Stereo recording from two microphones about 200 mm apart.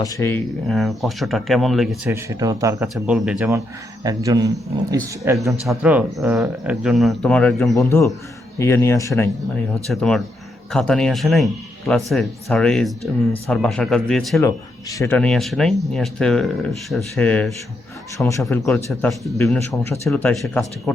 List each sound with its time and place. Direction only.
0.0 s speech: 15° left (ahead or behind); by 2.0 s centre (ahead or behind)
2.0 s a man's voice: 15° right (ahead or behind)
2.9 s speech: 5° right (ahead or behind)
4.0 s a man's voice: 15° right (ahead or behind); by 9.3 s 15° left (ahead or behind)
9.8 s speech: centre (ahead or behind)
14.4 s speech: 15° left (ahead or behind)
18.6 s speech: centre (ahead or behind)